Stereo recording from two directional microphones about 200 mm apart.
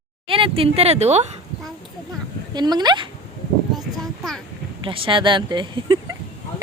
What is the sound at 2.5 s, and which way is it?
Speech, 20° right (ahead or behind).